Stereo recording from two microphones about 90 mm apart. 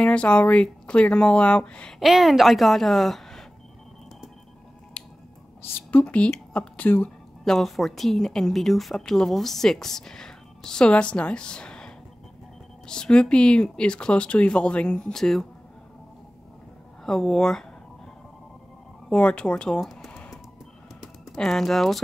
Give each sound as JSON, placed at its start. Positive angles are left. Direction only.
{"t": 0.0, "sound": "speech", "side_deg": 15}
{"t": 2.0, "sound": "a woman's voice", "side_deg": 0}
{"t": 5.0, "sound": "finger snapping", "side_deg": 10}
{"t": 5.7, "sound": "a woman's voice", "side_deg": 25}
{"t": 6.0, "sound": "speech", "side_deg": 15}
{"t": 7.4, "sound": "a woman's voice", "side_deg": 5}
{"t": 17.0, "sound": "a woman's voice", "side_deg": 5}
{"t": 19.0, "sound": "speech", "side_deg": 10}